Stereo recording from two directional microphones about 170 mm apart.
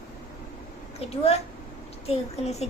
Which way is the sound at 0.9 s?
40° left (ahead or behind).